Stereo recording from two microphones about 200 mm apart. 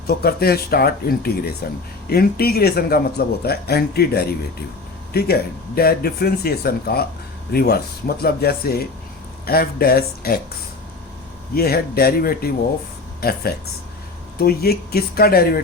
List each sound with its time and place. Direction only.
0.1 s speech: 50° left (ahead or behind)
11.5 s speech: 50° left (ahead or behind)